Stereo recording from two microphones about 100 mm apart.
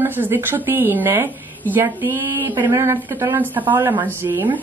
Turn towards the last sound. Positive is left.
turn(degrees=-20)  # may be behind; listen again after turning